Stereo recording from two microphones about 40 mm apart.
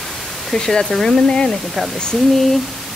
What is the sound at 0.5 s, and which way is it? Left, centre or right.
Speech, centre.